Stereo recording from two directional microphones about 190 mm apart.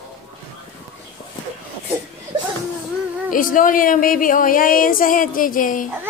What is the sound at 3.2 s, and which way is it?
Speech, 45° left (ahead or behind).